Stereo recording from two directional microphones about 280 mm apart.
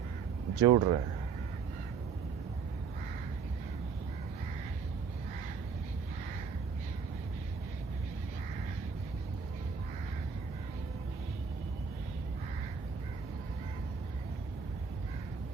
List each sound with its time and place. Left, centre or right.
0.5 s speech: centre